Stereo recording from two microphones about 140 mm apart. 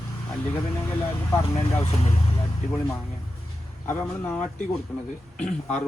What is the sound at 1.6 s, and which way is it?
Speech, 50° left (ahead or behind).